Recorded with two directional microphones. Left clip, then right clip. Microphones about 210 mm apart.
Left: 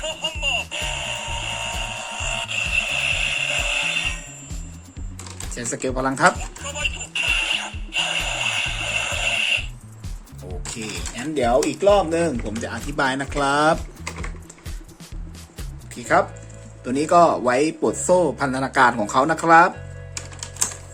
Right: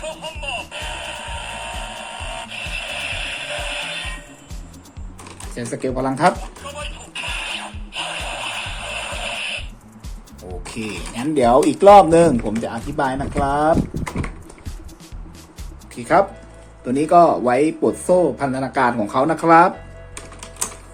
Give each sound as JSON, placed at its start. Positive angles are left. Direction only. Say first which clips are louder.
{"t": 0.3, "sound": "music", "louder": "left 7 dB", "side_deg": 5}
{"t": 5.5, "sound": "speech", "louder": "right 2 dB", "side_deg": 10}
{"t": 6.7, "sound": "music", "louder": "left 7 dB", "side_deg": 10}
{"t": 10.8, "sound": "speech", "louder": "right 3 dB", "side_deg": 0}
{"t": 12.4, "sound": "speech", "louder": "right 5 dB", "side_deg": 0}
{"t": 13.0, "sound": "speech", "louder": "right 1 dB", "side_deg": 20}
{"t": 16.0, "sound": "speech", "louder": "right 3 dB", "side_deg": 0}
{"t": 16.8, "sound": "speech", "louder": "right 3 dB", "side_deg": 10}